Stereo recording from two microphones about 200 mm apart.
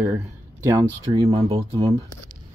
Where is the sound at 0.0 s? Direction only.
10° right (ahead or behind).